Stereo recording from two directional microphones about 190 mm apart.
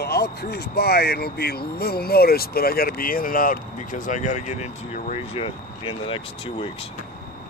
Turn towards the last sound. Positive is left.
turn(degrees=30)  # may be behind; listen again after turning